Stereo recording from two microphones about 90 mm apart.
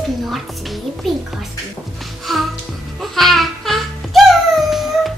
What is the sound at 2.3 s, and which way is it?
Music, centre (ahead or behind).